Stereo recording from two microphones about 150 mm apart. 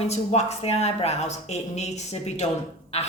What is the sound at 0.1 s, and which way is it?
A woman's voice, 45° left (ahead or behind).